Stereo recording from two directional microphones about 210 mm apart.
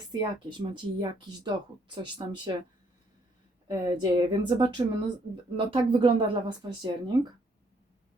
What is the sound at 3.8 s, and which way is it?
Speech, 20° right (ahead or behind).